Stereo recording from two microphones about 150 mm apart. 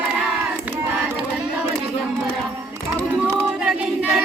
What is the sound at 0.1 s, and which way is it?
Crowd, 5° right (ahead or behind).